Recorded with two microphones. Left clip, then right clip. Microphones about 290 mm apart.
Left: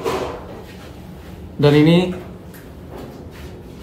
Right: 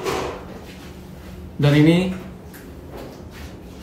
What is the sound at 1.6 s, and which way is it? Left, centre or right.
Speech, centre.